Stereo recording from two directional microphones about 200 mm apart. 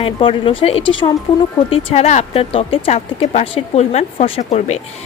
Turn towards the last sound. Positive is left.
turn(degrees=35)  # may be behind; listen again after turning